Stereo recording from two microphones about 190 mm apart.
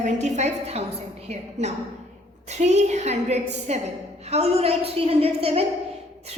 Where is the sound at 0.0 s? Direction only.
35° right (ahead or behind).